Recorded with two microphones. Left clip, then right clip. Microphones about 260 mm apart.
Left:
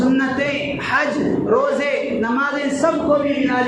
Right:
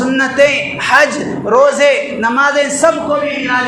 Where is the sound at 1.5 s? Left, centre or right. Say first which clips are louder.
Right 10 dB; right.